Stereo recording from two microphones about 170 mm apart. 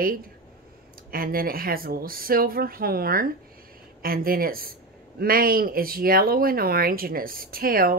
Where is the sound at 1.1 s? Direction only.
60° right (ahead or behind).